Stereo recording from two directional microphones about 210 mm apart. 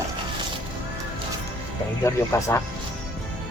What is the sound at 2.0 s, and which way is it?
Speech, 15° left (ahead or behind).